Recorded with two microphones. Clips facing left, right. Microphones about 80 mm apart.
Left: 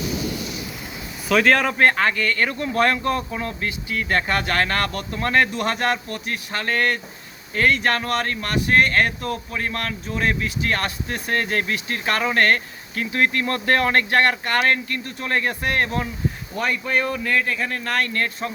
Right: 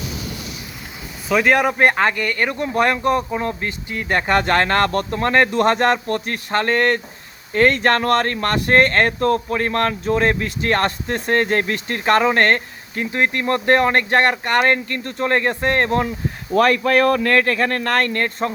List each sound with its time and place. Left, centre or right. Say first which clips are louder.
1.3 s speech: right 2 dB; centre; by 6.1 s right
6.1 s speech: right 7 dB; right
14.6 s speech: right 3 dB; right
16.6 s speech: right 9 dB; right